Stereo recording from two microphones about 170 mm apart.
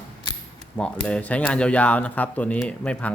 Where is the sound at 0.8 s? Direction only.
5° left (ahead or behind).